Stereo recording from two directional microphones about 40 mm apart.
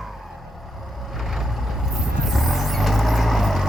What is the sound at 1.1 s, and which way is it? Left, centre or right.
Vehicle, centre.